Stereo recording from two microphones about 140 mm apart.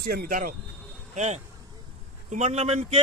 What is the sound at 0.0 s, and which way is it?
Speech, 90° right.